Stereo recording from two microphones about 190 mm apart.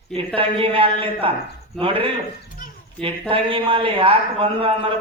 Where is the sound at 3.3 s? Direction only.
30° right (ahead or behind).